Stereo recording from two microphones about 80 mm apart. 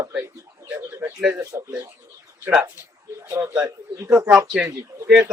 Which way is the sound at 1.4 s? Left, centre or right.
Right.